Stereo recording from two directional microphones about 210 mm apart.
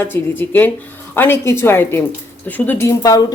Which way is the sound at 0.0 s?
10° left (ahead or behind).